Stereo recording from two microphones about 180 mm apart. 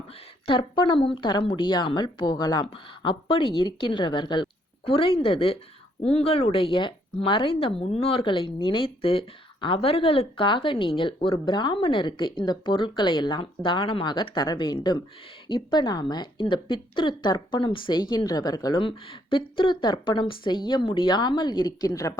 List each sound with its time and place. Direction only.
0.4 s a woman's voice: 30° left (ahead or behind)